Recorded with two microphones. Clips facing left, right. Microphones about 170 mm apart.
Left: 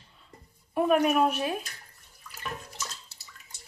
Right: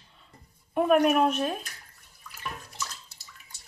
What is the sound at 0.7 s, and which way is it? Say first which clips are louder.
Speech: right 2 dB; centre (ahead or behind).